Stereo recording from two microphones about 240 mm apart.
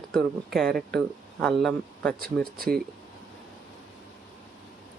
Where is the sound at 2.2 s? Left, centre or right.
Right.